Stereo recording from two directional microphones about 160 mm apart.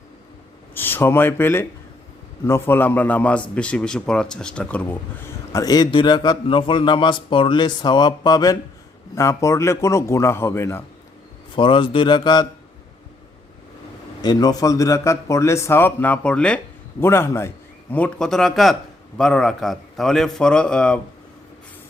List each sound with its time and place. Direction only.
0.7 s a man's voice: 10° left (ahead or behind)
5.5 s a man's voice: 20° left (ahead or behind)
11.5 s speech: 30° left (ahead or behind)
14.2 s a man's voice: 25° left (ahead or behind)
17.9 s a man's voice: 5° left (ahead or behind)